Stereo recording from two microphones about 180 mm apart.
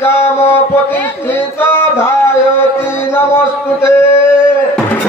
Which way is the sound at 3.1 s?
15° left (ahead or behind).